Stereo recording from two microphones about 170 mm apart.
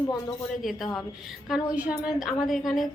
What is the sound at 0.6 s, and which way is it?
A woman's voice, centre (ahead or behind).